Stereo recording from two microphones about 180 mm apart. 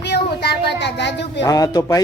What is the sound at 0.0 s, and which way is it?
Speech, 65° left (ahead or behind).